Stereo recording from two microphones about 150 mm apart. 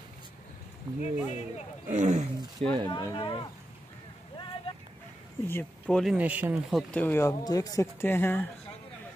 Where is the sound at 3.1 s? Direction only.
35° left (ahead or behind).